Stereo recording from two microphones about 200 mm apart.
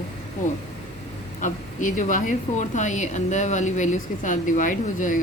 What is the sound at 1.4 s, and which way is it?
A woman's voice, 40° left (ahead or behind).